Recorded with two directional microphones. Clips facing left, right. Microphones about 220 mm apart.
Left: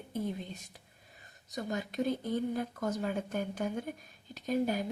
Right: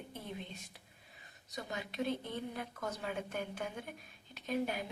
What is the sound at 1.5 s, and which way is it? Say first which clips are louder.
Speech: left 6 dB; 45° left (ahead or behind).